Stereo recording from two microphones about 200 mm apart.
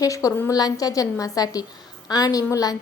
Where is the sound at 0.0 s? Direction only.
15° left (ahead or behind).